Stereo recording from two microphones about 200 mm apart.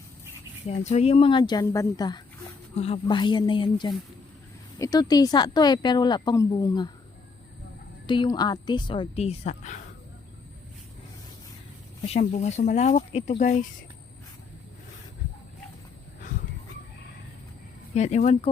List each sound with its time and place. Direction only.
0.7 s a woman's voice: 30° left (ahead or behind)
8.0 s a woman's voice: 25° left (ahead or behind)
12.0 s speech: 35° left (ahead or behind)
17.9 s speech: 35° left (ahead or behind)